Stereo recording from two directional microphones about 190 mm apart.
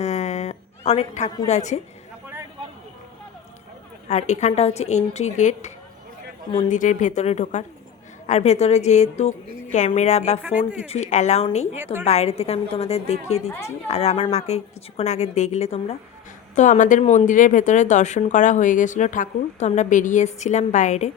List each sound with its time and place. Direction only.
0.0 s a sound: 35° left (ahead or behind)
1.5 s speech: 35° left (ahead or behind)
4.1 s speech: 35° left (ahead or behind)
10.4 s speech: 10° right (ahead or behind)
10.8 s speech: 35° left (ahead or behind)
13.5 s speech: 15° left (ahead or behind)
13.8 s speech: 35° left (ahead or behind)